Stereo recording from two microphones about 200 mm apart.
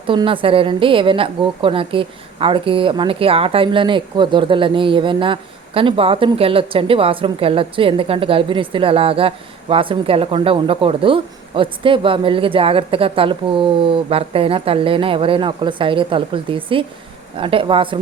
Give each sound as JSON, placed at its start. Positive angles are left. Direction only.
{"t": 0.1, "sound": "a woman's voice", "side_deg": -25}